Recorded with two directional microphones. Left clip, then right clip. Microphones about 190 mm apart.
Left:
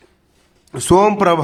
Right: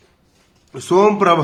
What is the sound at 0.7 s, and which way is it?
Speech, 45° left (ahead or behind).